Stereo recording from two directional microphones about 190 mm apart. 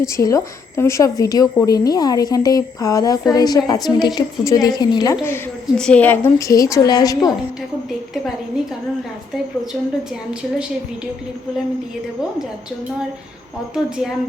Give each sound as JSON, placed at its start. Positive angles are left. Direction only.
{"t": 0.0, "sound": "a woman's voice", "side_deg": 15}
{"t": 13.7, "sound": "a woman's voice", "side_deg": -5}